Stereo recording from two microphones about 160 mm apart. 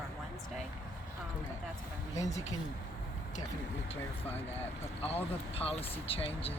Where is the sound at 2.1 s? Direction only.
20° left (ahead or behind).